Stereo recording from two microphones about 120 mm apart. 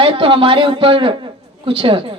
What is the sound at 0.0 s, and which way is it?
Speech, 45° right (ahead or behind).